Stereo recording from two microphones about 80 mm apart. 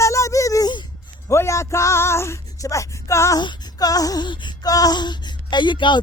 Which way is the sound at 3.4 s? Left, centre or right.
Left.